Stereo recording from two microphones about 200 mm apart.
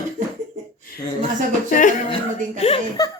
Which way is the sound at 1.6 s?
40° left (ahead or behind).